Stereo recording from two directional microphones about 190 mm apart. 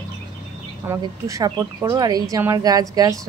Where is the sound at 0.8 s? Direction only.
15° right (ahead or behind).